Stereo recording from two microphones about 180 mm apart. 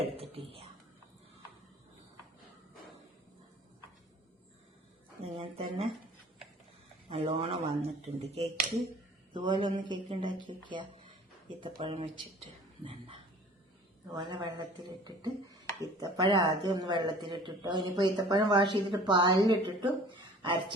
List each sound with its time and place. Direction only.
0.0 s whispering: 30° right (ahead or behind)
5.2 s a sound: 30° right (ahead or behind)
7.1 s speech: 35° right (ahead or behind)
9.3 s speech: 25° right (ahead or behind)
14.2 s speech: 25° right (ahead or behind)